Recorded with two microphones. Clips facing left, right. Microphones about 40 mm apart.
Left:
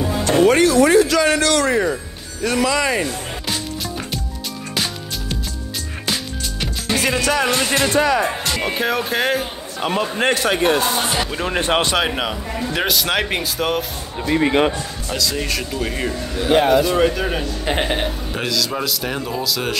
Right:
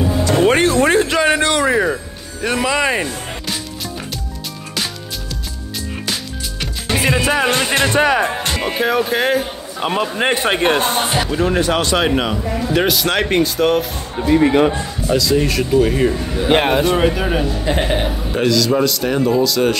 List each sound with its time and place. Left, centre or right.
0.5 s speech: right
1.2 s a man's voice: right
6.9 s music: right
7.5 s speech: right
8.4 s music: right
8.6 s speech: centre
10.3 s speech: right
11.1 s speech: centre
11.6 s speech: left
12.0 s speech: centre
16.5 s speech: right
17.0 s speech: centre